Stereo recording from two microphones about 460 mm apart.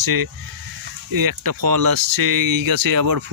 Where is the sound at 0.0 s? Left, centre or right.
Right.